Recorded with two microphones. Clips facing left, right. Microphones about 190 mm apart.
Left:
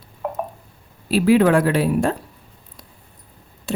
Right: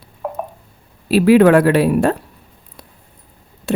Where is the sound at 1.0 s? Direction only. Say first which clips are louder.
Right 5 dB; 70° right (ahead or behind).